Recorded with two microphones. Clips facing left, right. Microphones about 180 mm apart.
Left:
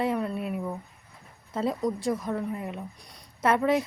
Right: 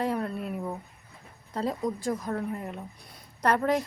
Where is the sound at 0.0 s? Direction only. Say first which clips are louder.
Left 2 dB; centre (ahead or behind).